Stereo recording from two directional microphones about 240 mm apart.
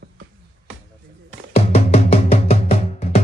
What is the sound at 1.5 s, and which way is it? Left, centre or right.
Music, left.